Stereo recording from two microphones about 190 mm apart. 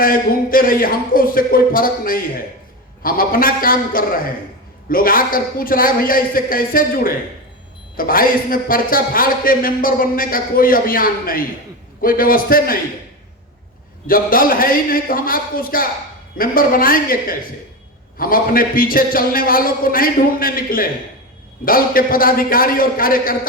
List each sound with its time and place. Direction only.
0.0 s a man's voice: 50° left (ahead or behind)
14.1 s a man's voice: 50° left (ahead or behind)